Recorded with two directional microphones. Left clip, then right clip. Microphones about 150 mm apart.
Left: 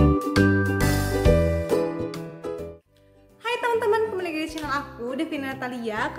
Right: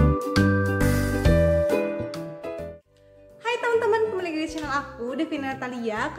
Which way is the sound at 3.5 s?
5° left (ahead or behind).